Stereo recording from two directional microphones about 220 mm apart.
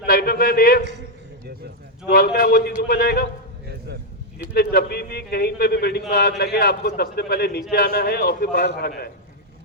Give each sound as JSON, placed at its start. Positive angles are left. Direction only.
{"t": 0.0, "sound": "a sound", "side_deg": 45}
{"t": 2.0, "sound": "a man's voice", "side_deg": 45}
{"t": 4.5, "sound": "a man's voice", "side_deg": 45}